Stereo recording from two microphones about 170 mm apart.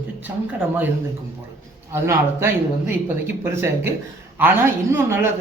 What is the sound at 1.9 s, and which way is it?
A man's voice, 15° right (ahead or behind).